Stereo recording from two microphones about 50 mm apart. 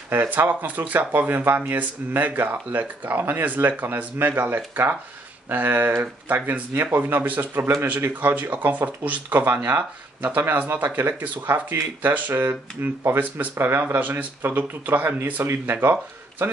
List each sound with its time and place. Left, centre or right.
0.1 s speech: right